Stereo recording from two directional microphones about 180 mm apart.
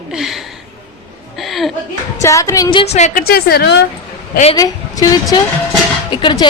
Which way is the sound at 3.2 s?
60° left (ahead or behind).